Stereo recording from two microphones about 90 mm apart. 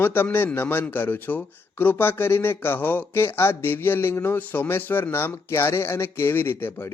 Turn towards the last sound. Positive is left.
turn(degrees=25)  # may be behind; listen again after turning